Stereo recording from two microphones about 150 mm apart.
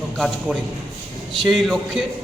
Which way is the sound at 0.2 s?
Centre (ahead or behind).